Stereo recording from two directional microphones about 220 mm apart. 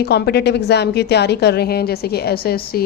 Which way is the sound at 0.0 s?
45° left (ahead or behind).